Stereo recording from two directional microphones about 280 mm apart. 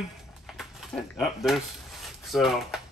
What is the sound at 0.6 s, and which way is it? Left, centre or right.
Speech, centre.